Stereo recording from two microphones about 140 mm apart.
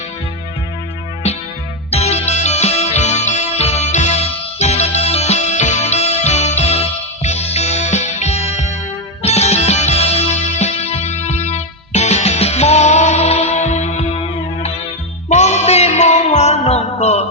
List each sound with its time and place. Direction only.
1.9 s music: 50° left (ahead or behind)